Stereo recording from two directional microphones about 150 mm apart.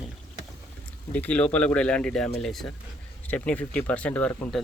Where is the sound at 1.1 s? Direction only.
10° left (ahead or behind).